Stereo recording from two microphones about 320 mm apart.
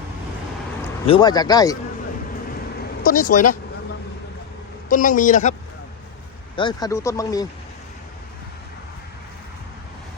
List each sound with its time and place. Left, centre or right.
1.0 s speech: centre
3.0 s a man's voice: left
4.9 s a man's voice: left
6.6 s speech: centre